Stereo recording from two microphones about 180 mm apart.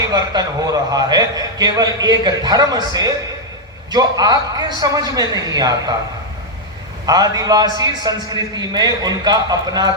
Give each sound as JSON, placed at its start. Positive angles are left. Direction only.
{"t": 0.0, "sound": "a man's voice", "side_deg": -20}
{"t": 7.0, "sound": "a man's voice", "side_deg": -20}